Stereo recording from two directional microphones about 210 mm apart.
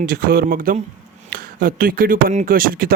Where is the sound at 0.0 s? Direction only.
45° right (ahead or behind).